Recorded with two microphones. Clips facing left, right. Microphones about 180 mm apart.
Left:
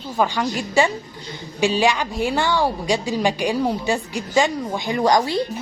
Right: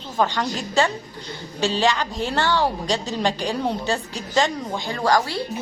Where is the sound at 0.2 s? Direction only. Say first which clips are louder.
Left 1 dB; 10° left (ahead or behind).